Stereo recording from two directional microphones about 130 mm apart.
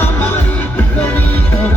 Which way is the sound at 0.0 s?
15° left (ahead or behind).